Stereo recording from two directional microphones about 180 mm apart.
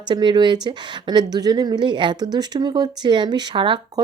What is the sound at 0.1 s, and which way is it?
Speech, 25° right (ahead or behind).